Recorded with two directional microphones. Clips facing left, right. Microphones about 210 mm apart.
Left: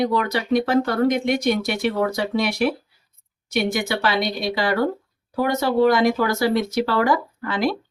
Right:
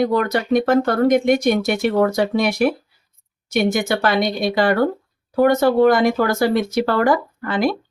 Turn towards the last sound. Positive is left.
turn(degrees=-50)  # may be behind; listen again after turning